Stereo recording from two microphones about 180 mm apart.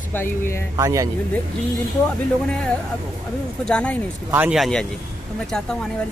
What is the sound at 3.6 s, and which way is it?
Speech, 5° left (ahead or behind).